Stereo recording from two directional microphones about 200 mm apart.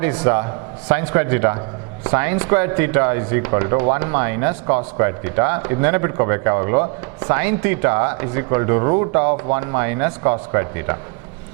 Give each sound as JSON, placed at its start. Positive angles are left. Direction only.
{"t": 0.0, "sound": "speech", "side_deg": -10}